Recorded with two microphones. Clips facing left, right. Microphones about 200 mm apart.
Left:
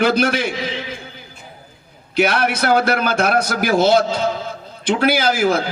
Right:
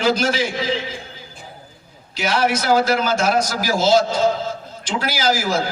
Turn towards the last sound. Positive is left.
turn(degrees=60)  # may be behind; listen again after turning